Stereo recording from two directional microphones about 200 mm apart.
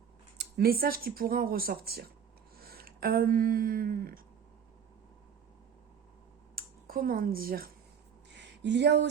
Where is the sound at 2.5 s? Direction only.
50° right (ahead or behind).